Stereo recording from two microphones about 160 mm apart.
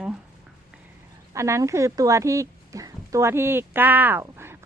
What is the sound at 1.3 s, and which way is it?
Speech, 20° right (ahead or behind).